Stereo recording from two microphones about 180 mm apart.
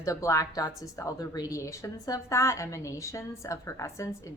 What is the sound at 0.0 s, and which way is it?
A woman's voice, 20° left (ahead or behind).